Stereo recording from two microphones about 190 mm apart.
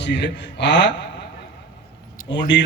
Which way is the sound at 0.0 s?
65° left (ahead or behind).